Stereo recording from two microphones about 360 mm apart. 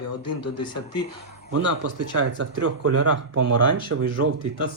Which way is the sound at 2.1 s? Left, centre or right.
Right.